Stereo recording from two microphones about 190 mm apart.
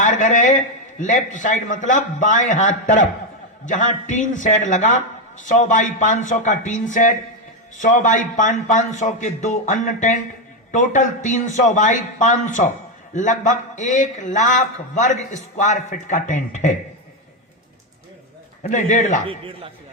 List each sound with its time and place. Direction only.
0.0 s a man's voice: 40° left (ahead or behind)
18.6 s a man's voice: 40° left (ahead or behind)